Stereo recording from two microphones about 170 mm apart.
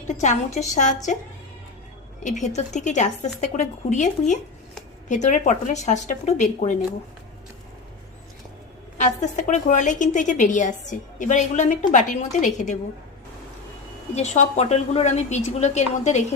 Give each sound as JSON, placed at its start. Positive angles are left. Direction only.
{"t": 0.1, "sound": "a woman's voice", "side_deg": 45}
{"t": 2.2, "sound": "a woman's voice", "side_deg": 45}
{"t": 9.0, "sound": "a woman's voice", "side_deg": 45}
{"t": 14.2, "sound": "a woman's voice", "side_deg": 40}